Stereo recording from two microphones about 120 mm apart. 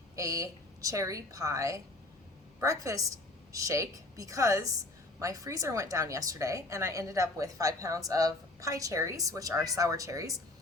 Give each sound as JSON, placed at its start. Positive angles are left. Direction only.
{"t": 0.2, "sound": "a woman's voice", "side_deg": -30}